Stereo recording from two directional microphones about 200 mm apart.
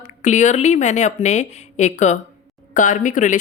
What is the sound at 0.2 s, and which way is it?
Speech, 35° left (ahead or behind).